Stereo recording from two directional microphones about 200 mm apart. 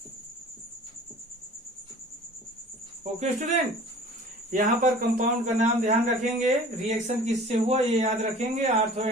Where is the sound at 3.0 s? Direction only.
35° right (ahead or behind).